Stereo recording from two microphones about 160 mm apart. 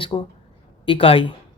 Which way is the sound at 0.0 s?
30° left (ahead or behind).